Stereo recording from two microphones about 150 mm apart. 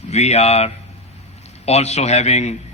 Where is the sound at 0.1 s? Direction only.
45° left (ahead or behind).